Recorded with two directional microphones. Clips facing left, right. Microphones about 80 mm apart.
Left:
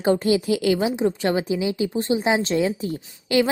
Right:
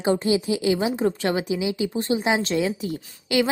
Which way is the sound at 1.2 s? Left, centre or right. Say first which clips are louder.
Left 2 dB; left.